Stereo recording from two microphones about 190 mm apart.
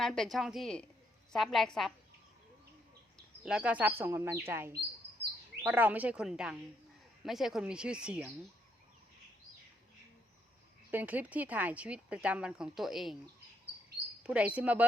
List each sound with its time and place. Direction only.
0.0 s speech: centre (ahead or behind)
3.2 s speech: 5° right (ahead or behind)
10.9 s speech: 10° right (ahead or behind)
14.3 s speech: 5° right (ahead or behind)